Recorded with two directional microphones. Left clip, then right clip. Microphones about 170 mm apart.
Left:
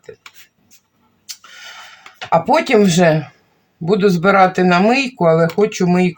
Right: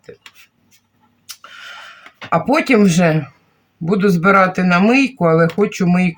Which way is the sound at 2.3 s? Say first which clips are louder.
Left 1 dB; 20° left (ahead or behind).